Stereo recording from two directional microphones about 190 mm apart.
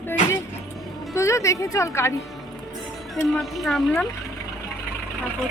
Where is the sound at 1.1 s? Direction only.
15° left (ahead or behind).